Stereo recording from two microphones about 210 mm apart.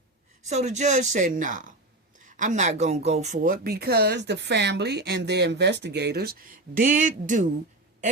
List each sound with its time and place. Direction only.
0.4 s speech: 35° right (ahead or behind)